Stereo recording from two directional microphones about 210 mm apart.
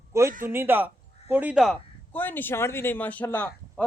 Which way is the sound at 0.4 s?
10° right (ahead or behind).